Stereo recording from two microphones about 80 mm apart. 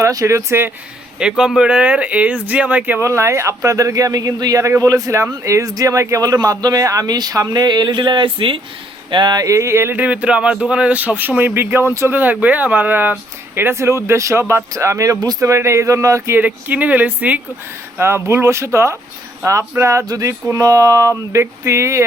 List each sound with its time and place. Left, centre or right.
0.0 s speech: right
1.2 s speech: centre
3.0 s speech: right
9.0 s speech: right
9.4 s speech: right
16.4 s speech: centre
17.9 s speech: right